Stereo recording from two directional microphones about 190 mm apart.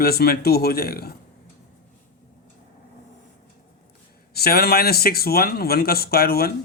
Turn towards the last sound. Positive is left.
turn(degrees=55)  # may be behind; listen again after turning